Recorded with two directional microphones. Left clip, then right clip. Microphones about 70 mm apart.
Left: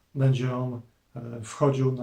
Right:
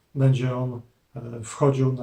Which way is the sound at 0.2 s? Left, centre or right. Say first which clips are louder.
Right 3 dB; left.